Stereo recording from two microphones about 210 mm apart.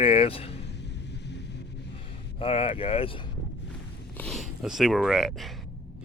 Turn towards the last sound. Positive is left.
turn(degrees=0)  # may be behind; listen again after turning